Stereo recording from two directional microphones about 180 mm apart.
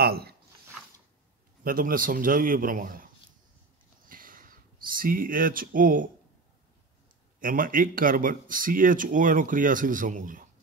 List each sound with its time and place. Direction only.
0.0 s zipper: 60° right (ahead or behind)
1.6 s speech: 50° right (ahead or behind)
4.1 s a sound: 50° right (ahead or behind)
7.3 s speech: 50° right (ahead or behind)